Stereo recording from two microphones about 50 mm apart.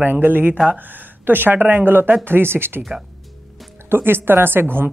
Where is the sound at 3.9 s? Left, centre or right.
Right.